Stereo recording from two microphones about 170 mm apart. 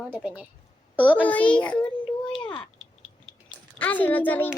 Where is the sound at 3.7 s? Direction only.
10° left (ahead or behind).